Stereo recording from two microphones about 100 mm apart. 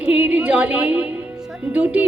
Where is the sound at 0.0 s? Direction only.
15° right (ahead or behind).